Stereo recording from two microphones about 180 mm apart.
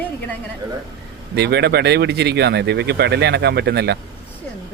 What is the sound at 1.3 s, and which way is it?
Speech, 65° right (ahead or behind).